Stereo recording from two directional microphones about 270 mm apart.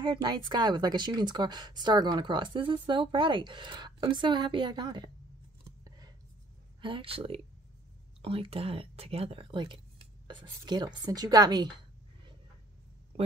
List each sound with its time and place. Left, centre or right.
0.0 s a woman's voice: centre
5.6 s scissors: centre
6.8 s a woman's voice: centre